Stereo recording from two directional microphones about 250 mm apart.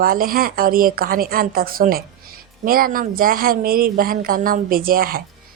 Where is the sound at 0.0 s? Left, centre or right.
Right.